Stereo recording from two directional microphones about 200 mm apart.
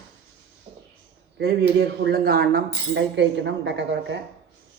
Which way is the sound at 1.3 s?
50° right (ahead or behind).